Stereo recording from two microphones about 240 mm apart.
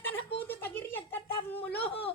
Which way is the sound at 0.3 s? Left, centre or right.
Centre.